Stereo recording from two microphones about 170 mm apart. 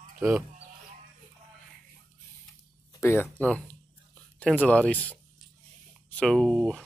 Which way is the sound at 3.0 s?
15° left (ahead or behind).